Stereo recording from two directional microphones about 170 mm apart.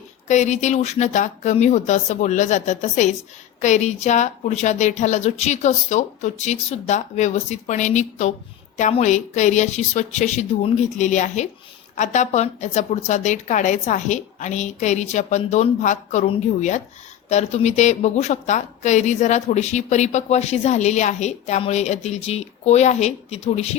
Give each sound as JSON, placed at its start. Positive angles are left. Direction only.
{"t": 0.3, "sound": "a woman's voice", "side_deg": 45}